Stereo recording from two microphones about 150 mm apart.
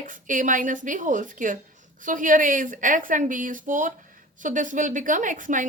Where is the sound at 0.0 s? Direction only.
60° right (ahead or behind).